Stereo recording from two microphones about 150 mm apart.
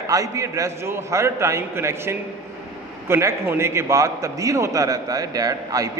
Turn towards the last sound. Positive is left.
turn(degrees=-25)  # may be behind; listen again after turning